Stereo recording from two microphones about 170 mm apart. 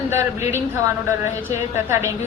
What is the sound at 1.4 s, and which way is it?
Speech, 15° right (ahead or behind).